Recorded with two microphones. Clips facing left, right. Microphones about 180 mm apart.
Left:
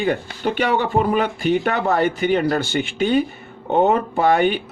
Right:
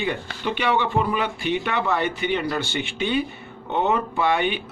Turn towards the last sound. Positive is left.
turn(degrees=45)  # may be behind; listen again after turning